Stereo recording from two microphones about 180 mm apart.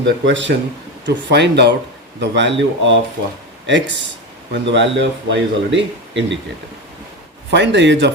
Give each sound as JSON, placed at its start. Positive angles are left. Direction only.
{"t": 0.0, "sound": "a man's voice", "side_deg": -90}
{"t": 1.0, "sound": "speech", "side_deg": -70}
{"t": 7.5, "sound": "speech", "side_deg": -75}